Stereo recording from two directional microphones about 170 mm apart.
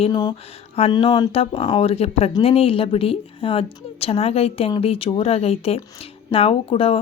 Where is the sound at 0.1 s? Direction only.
25° left (ahead or behind).